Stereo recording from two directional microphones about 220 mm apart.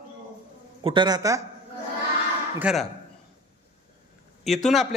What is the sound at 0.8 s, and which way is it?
Speech, 20° right (ahead or behind).